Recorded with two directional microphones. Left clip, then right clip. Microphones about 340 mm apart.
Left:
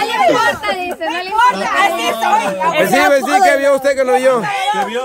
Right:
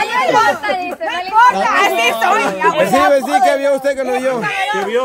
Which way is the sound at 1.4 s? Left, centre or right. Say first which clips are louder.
Right 2 dB; centre.